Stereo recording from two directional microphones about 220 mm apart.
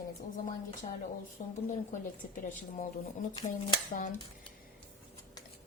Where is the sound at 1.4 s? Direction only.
35° left (ahead or behind).